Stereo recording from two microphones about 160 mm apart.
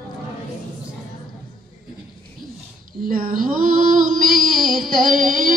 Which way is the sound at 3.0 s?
60° right (ahead or behind).